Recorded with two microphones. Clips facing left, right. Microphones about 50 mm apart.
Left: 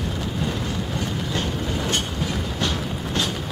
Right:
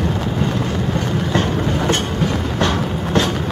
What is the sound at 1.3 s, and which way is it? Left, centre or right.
Train, right.